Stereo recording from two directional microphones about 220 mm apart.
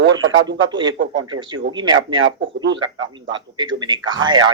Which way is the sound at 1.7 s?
20° right (ahead or behind).